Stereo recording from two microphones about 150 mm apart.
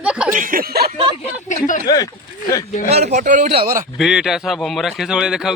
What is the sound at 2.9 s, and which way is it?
Speech, 50° right (ahead or behind).